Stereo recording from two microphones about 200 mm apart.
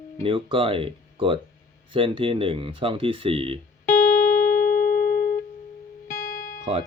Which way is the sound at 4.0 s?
45° left (ahead or behind).